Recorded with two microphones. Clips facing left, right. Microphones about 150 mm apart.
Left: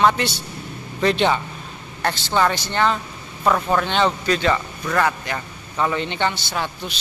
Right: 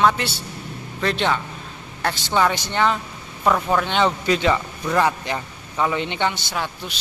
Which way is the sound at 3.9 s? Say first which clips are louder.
Even; 10° right (ahead or behind).